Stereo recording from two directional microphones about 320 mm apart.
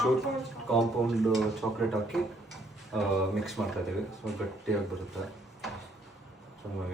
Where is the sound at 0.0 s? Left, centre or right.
Centre.